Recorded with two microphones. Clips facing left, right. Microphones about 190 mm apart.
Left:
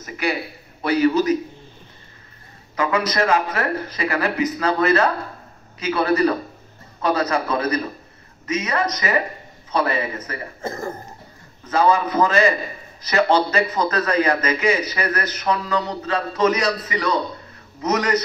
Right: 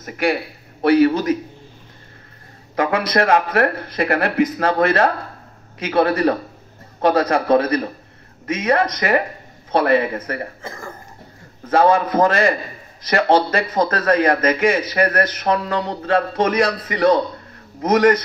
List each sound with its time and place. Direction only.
0.0 s a man's voice: 55° right (ahead or behind)
2.7 s a man's voice: 55° right (ahead or behind)
10.6 s speech: 40° left (ahead or behind)
11.6 s a man's voice: 55° right (ahead or behind)